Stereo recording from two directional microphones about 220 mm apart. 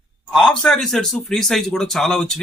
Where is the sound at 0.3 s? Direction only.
5° left (ahead or behind).